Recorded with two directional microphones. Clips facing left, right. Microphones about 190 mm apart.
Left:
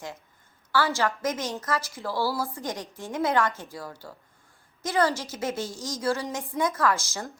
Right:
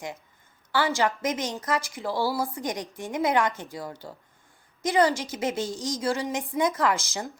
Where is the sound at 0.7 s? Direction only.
15° right (ahead or behind).